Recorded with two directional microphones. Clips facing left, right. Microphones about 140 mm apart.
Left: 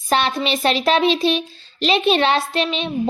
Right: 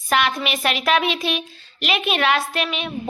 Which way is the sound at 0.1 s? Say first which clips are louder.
Left 2 dB; 30° left (ahead or behind).